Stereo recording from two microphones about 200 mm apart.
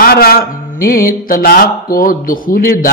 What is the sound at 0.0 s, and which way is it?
Speech, 50° left (ahead or behind).